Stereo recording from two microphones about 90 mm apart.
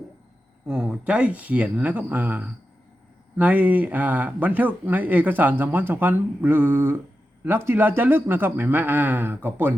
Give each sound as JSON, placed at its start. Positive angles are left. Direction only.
{"t": 0.7, "sound": "speech", "side_deg": -10}